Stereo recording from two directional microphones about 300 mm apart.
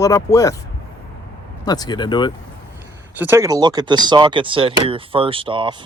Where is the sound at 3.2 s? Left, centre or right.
Centre.